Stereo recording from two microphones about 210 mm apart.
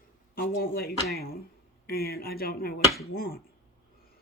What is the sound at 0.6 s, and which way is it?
Speech, 45° left (ahead or behind).